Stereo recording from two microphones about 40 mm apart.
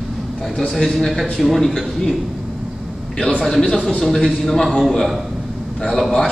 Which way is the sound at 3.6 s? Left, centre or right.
Centre.